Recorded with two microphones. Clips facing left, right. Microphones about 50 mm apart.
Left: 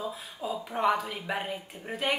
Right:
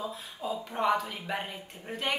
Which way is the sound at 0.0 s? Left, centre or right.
Centre.